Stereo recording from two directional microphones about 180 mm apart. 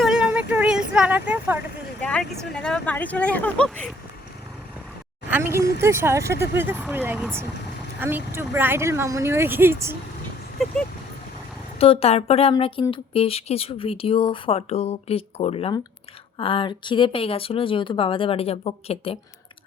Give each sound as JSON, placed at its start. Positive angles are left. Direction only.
{"t": 0.0, "sound": "vehicle", "side_deg": -5}
{"t": 2.0, "sound": "speech", "side_deg": 5}
{"t": 5.3, "sound": "speech", "side_deg": -15}
{"t": 10.6, "sound": "speech", "side_deg": 0}
{"t": 11.8, "sound": "speech", "side_deg": 35}